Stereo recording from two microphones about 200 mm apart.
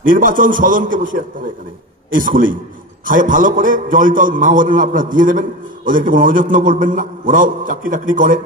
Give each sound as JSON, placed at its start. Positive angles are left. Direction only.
{"t": 0.0, "sound": "a man's voice", "side_deg": -40}